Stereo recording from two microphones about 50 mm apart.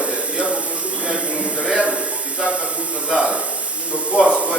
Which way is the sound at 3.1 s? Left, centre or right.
Centre.